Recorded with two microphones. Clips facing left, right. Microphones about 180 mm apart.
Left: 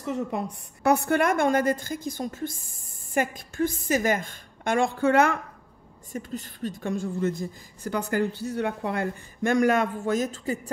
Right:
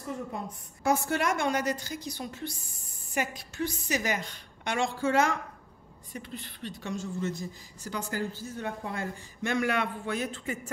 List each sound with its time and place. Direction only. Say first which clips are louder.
0.0 s a woman's voice: left 7 dB; 75° left (ahead or behind); by 5.4 s 60° left (ahead or behind)
6.1 s a woman's voice: left 7 dB; 45° left (ahead or behind)